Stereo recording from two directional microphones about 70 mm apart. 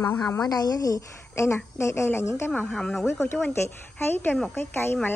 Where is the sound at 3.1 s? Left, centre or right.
Left.